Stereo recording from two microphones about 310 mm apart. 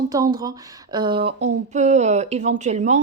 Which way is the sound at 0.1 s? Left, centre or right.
Centre.